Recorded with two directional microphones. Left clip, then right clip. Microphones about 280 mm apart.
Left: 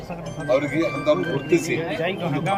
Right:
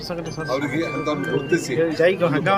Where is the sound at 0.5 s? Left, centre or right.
Centre.